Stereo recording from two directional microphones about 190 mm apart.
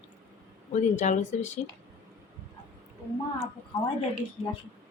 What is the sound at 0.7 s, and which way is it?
Speech, 40° left (ahead or behind).